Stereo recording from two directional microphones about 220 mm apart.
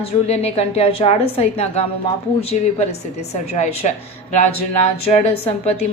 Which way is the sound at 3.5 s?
30° left (ahead or behind).